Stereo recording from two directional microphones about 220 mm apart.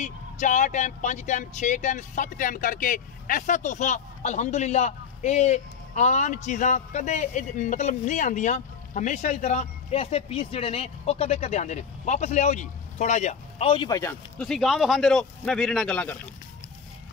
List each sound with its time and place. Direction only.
0.0 s speech: 35° left (ahead or behind); by 14.1 s 15° left (ahead or behind)
14.4 s speech: centre (ahead or behind)